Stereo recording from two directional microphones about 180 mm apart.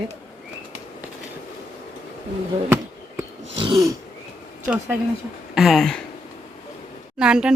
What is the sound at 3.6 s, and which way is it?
Throat clearing, 20° right (ahead or behind).